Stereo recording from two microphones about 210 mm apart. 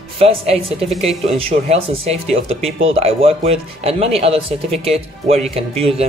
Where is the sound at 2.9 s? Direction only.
30° right (ahead or behind).